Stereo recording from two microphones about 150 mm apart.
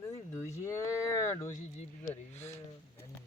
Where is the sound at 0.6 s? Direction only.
20° left (ahead or behind).